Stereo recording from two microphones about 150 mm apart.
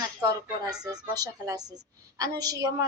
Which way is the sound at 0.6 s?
25° right (ahead or behind).